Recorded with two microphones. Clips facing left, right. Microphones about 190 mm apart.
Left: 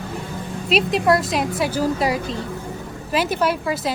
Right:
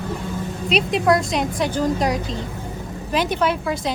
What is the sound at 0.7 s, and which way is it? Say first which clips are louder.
A woman's voice: left 1 dB; centre (ahead or behind).